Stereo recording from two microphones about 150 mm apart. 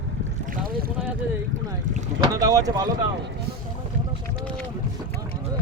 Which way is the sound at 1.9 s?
60° right (ahead or behind).